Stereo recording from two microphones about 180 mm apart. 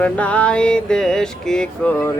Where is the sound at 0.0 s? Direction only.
5° left (ahead or behind).